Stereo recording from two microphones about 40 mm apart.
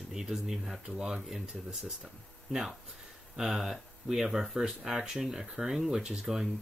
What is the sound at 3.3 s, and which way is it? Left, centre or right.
Speech, centre.